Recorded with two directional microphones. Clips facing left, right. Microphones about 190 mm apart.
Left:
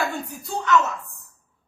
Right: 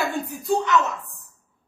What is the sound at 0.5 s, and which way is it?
Speech, 15° right (ahead or behind).